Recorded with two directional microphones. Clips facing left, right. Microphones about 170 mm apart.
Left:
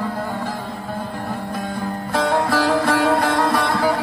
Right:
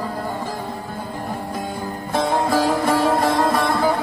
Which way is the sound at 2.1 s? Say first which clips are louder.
Even; 20° right (ahead or behind).